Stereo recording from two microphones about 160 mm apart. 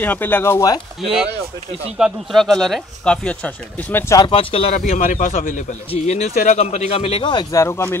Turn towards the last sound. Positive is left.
turn(degrees=15)  # may be behind; listen again after turning